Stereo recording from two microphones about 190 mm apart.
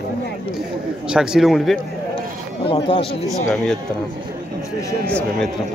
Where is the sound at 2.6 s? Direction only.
25° left (ahead or behind).